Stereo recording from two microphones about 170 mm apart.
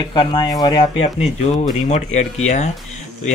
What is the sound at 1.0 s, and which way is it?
Speech, 40° left (ahead or behind).